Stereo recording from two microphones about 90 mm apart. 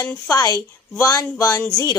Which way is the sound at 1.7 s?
50° left (ahead or behind).